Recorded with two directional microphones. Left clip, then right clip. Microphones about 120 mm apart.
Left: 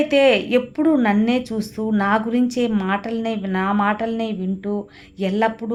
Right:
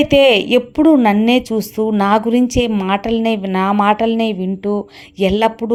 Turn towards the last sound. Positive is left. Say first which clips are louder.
# right 6 dB
turn(degrees=-45)  # may be behind; listen again after turning